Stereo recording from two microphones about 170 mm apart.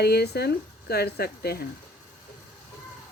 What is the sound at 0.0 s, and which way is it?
Speech, 70° left (ahead or behind).